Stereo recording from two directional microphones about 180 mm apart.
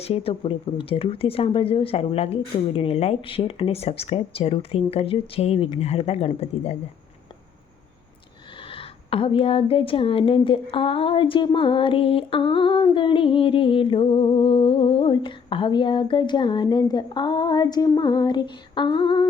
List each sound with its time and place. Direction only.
0.0 s speech: 35° left (ahead or behind)
8.6 s speech: 30° left (ahead or behind)